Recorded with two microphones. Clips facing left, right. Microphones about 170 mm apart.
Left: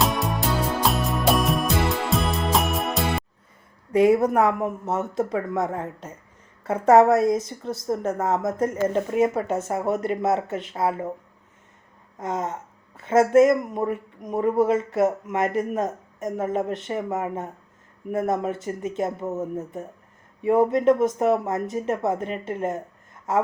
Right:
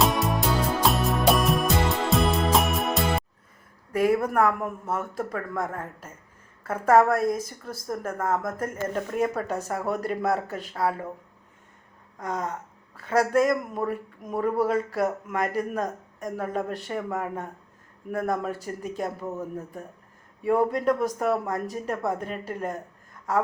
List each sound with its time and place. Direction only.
0.0 s music: centre (ahead or behind)
3.9 s speech: 25° left (ahead or behind)
12.1 s a sound: 25° left (ahead or behind)
13.0 s speech: 20° left (ahead or behind)